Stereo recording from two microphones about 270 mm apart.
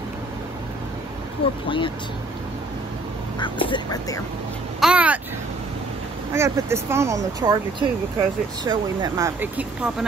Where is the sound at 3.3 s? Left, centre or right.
Centre.